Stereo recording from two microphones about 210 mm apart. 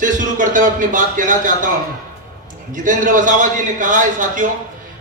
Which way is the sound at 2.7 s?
40° right (ahead or behind).